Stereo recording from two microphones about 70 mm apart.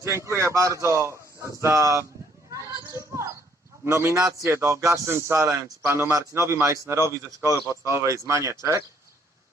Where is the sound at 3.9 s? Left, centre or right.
Right.